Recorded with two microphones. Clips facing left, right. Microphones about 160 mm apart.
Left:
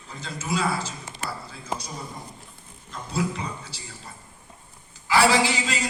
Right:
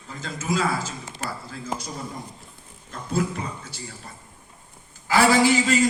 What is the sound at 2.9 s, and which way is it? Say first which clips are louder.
Speech: right 2 dB; 50° right (ahead or behind).